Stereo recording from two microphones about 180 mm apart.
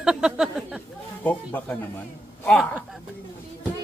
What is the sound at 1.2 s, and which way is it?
Speech, 10° left (ahead or behind).